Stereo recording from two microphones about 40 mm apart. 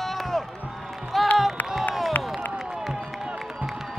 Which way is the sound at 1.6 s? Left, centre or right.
Left.